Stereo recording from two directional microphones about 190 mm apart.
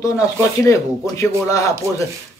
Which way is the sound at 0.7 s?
15° left (ahead or behind).